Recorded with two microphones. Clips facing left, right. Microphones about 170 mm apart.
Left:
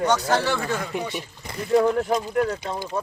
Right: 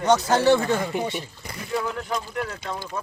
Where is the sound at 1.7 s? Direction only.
45° left (ahead or behind).